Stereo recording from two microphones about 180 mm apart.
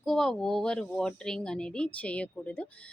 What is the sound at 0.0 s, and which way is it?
A woman's voice, centre (ahead or behind).